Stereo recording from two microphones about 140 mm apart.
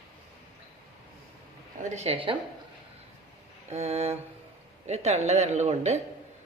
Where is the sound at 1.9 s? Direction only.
50° right (ahead or behind).